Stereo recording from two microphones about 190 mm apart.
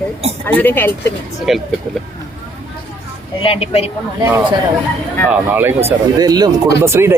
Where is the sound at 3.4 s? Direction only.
30° left (ahead or behind).